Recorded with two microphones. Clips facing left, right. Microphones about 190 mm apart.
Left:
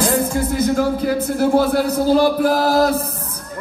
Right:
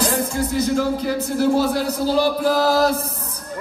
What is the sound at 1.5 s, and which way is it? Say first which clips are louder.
Speech: left 4 dB; 55° left (ahead or behind).